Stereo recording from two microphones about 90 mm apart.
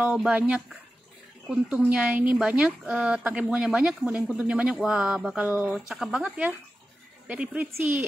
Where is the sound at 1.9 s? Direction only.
15° right (ahead or behind).